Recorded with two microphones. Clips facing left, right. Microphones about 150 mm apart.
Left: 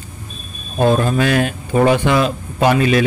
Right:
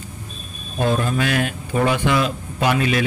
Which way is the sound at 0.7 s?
40° left (ahead or behind).